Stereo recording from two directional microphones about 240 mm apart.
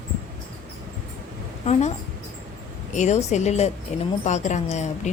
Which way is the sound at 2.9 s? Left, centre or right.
Left.